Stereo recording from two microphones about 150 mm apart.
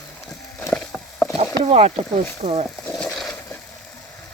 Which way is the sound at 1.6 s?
40° right (ahead or behind).